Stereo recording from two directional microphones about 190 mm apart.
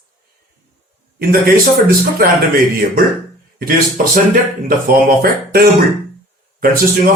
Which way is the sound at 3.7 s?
45° right (ahead or behind).